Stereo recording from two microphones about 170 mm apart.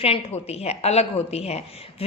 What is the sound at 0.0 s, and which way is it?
A woman's voice, 35° left (ahead or behind).